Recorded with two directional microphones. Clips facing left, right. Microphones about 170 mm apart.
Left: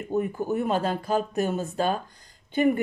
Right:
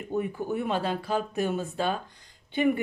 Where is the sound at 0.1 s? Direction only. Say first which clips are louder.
Left 3 dB; 45° left (ahead or behind).